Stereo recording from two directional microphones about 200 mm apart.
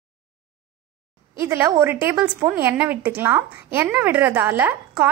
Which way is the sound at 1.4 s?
10° right (ahead or behind).